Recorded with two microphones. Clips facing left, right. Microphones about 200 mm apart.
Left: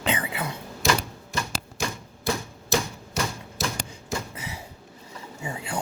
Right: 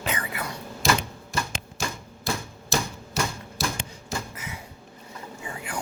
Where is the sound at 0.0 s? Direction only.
20° left (ahead or behind).